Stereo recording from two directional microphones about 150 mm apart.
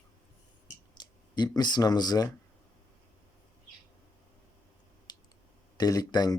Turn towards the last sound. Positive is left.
turn(degrees=25)  # may be behind; listen again after turning